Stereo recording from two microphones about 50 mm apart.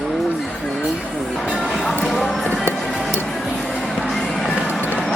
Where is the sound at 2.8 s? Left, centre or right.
Centre.